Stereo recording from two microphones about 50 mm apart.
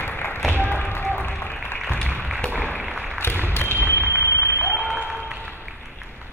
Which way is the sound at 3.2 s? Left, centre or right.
Left.